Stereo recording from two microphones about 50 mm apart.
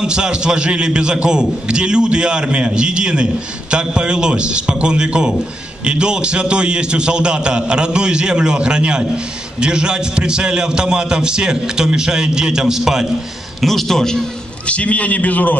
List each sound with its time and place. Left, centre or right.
0.0 s a man's voice: centre
13.6 s a man's voice: centre
14.7 s a man's voice: left